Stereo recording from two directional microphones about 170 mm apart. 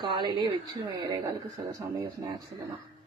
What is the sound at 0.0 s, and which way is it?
A woman's voice, 25° right (ahead or behind).